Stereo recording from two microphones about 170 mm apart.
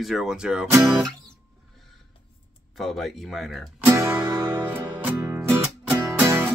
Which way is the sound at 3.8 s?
15° right (ahead or behind).